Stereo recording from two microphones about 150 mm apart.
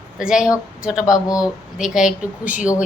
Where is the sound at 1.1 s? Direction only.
25° left (ahead or behind).